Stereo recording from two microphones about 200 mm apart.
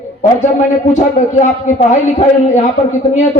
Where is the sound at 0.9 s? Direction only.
35° left (ahead or behind).